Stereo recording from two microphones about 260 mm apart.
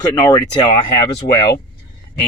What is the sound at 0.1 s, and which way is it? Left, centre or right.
Speech, centre.